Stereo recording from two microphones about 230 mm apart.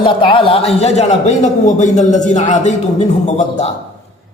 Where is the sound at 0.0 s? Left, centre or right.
Left.